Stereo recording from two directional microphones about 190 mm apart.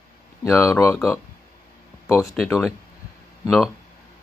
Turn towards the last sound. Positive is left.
turn(degrees=0)  # may be behind; listen again after turning